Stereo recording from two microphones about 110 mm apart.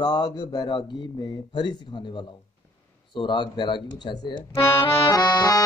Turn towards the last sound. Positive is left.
turn(degrees=40)  # may be behind; listen again after turning